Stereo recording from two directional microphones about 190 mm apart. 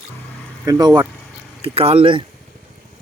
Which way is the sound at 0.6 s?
20° right (ahead or behind).